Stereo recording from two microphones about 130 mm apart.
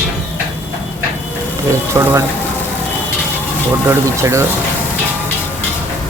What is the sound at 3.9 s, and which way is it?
Speech, 20° right (ahead or behind).